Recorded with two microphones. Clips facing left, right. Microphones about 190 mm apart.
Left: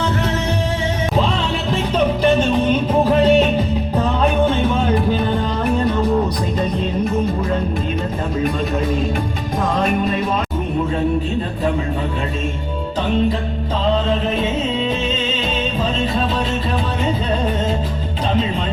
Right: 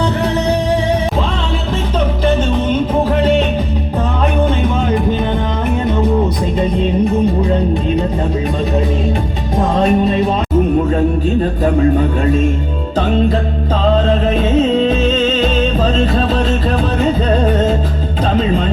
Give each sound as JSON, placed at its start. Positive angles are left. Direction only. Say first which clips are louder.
{"t": 9.8, "sound": "music", "louder": "right 6 dB", "side_deg": -25}